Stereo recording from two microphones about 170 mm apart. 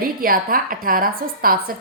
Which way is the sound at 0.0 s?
55° right (ahead or behind).